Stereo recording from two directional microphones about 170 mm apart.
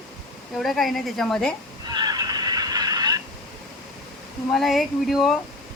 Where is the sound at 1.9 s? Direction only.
25° right (ahead or behind).